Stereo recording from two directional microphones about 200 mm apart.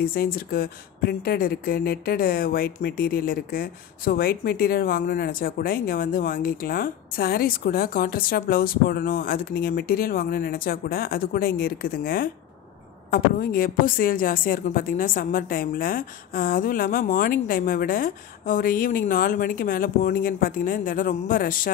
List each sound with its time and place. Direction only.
0.0 s a woman's voice: 50° left (ahead or behind)